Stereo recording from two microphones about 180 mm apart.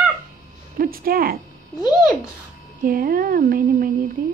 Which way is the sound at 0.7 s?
55° right (ahead or behind).